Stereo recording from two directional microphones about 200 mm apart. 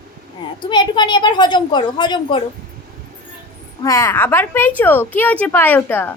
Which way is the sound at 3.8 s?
15° left (ahead or behind).